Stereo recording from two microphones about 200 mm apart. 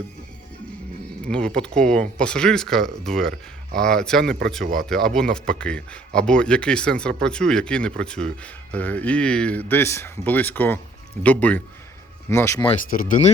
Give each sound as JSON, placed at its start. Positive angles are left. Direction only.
{"t": 1.2, "sound": "speech", "side_deg": 5}
{"t": 12.9, "sound": "speech", "side_deg": 40}